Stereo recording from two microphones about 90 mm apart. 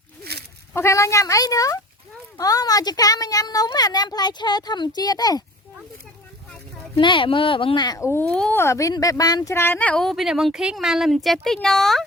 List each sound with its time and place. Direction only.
0.7 s a woman's voice: 30° left (ahead or behind)
6.9 s speech: 70° left (ahead or behind)
7.9 s speech: 35° left (ahead or behind)
8.2 s a child's voice: 15° left (ahead or behind)
8.6 s speech: 35° left (ahead or behind); by 10.0 s 20° left (ahead or behind)
10.0 s speech: centre (ahead or behind)